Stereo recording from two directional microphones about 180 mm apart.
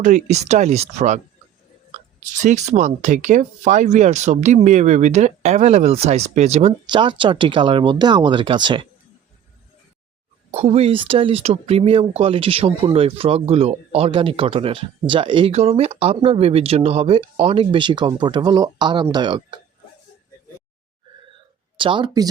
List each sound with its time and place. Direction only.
0.0 s speech: 40° right (ahead or behind)
2.3 s speech: 45° right (ahead or behind); by 8.9 s 25° right (ahead or behind)
10.5 s speech: 35° right (ahead or behind)
21.8 s speech: 25° right (ahead or behind)